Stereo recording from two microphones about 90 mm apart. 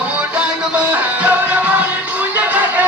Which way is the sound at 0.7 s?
15° right (ahead or behind).